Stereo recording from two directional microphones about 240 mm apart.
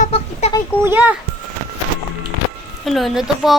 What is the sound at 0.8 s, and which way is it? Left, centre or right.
Speech, centre.